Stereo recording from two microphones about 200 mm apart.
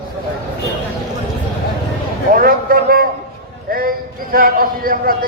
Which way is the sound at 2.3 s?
45° right (ahead or behind).